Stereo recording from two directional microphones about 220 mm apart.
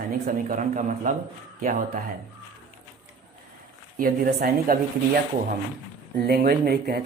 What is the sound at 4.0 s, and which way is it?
Speech, 40° right (ahead or behind).